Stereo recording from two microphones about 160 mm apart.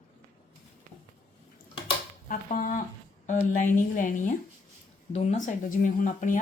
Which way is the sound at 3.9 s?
55° left (ahead or behind).